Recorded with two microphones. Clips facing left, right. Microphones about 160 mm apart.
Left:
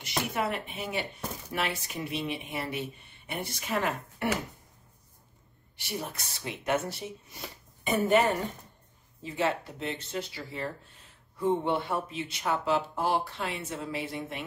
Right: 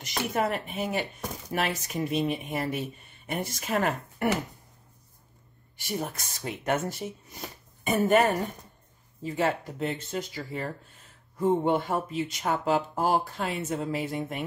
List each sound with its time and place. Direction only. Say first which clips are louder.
0.0 s speech: right 3 dB; 40° right (ahead or behind)
5.8 s a woman's voice: right 4 dB; 45° right (ahead or behind)
9.2 s speech: right 2 dB; 45° right (ahead or behind)